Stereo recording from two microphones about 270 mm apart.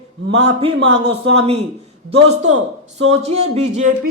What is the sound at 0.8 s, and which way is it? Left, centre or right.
Speech, right.